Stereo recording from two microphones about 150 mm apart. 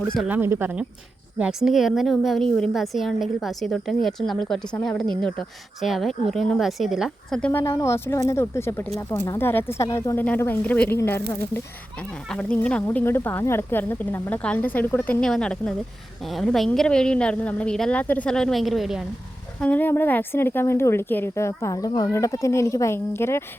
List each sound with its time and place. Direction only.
0.3 s a woman's voice: 15° right (ahead or behind); by 7.5 s 5° left (ahead or behind)
7.5 s speech: 20° left (ahead or behind)
12.3 s a woman's voice: 5° left (ahead or behind)
19.5 s speech: 10° left (ahead or behind)